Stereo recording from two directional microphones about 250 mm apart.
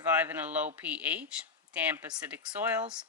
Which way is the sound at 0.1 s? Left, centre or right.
Centre.